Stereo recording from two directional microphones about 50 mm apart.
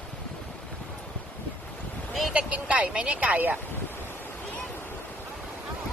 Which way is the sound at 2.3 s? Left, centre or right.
Right.